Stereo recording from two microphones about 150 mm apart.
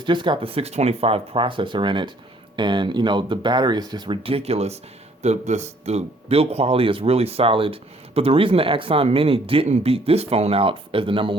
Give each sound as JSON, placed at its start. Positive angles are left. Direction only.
{"t": 0.0, "sound": "speech", "side_deg": -30}